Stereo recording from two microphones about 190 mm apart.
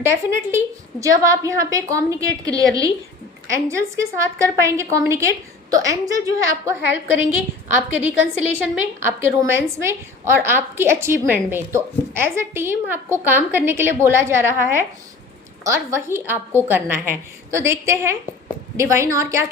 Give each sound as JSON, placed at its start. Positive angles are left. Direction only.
{"t": 0.0, "sound": "a woman's voice", "side_deg": -15}